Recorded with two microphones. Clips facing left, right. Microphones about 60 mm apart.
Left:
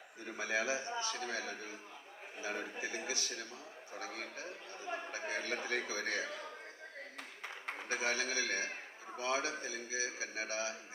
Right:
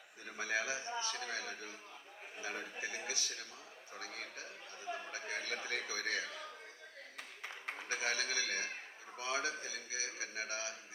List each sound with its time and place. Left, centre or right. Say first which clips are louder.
0.3 s a man's voice: left 2 dB; left
4.0 s a man's voice: left 3 dB; left
7.9 s a man's voice: left 2 dB; left